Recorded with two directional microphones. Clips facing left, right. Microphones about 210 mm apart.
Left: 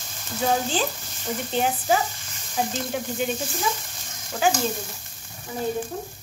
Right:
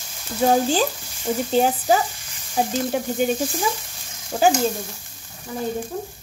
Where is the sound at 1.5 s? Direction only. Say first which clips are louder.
Right 4 dB; 40° right (ahead or behind).